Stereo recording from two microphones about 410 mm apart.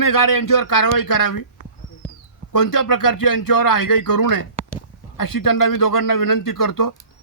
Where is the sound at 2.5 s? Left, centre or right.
Left.